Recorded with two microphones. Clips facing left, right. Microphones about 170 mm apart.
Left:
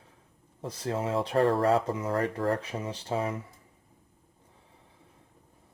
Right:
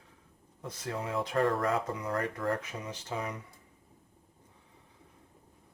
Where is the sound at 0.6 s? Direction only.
30° left (ahead or behind).